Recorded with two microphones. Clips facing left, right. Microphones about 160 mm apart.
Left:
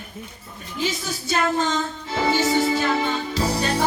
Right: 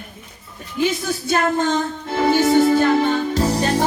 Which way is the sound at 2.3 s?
55° right (ahead or behind).